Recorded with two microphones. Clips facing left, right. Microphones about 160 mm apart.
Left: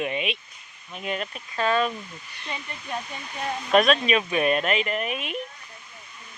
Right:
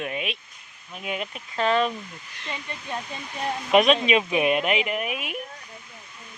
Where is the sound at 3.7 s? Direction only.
20° right (ahead or behind).